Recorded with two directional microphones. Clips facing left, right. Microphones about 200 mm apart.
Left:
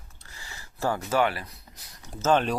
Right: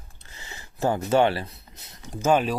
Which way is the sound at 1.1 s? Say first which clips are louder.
Right 6 dB; 30° right (ahead or behind).